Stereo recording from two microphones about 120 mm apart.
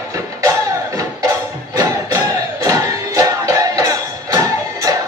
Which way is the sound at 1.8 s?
30° right (ahead or behind).